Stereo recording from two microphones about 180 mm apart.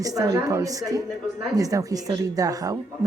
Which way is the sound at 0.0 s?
20° right (ahead or behind).